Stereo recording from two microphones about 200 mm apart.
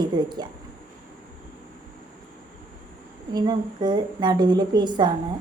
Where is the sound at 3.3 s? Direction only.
20° right (ahead or behind).